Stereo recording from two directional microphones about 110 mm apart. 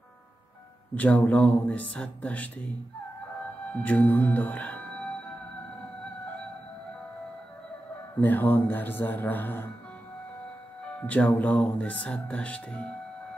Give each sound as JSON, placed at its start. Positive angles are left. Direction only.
{"t": 0.9, "sound": "speech", "side_deg": 15}
{"t": 3.8, "sound": "speech", "side_deg": 15}
{"t": 8.2, "sound": "speech", "side_deg": 15}
{"t": 11.0, "sound": "speech", "side_deg": 10}